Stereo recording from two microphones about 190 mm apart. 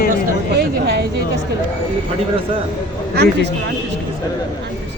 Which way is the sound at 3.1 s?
60° right (ahead or behind).